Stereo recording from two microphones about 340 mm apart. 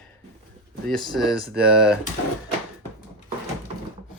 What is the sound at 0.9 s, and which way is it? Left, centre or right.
Speech, centre.